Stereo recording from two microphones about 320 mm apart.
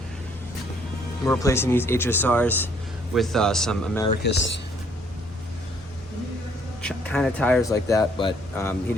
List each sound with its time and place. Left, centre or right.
1.2 s a man's voice: centre
4.2 s speech: left
6.8 s speech: centre